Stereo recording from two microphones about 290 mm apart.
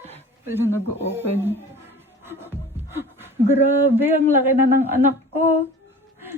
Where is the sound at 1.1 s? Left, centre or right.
Centre.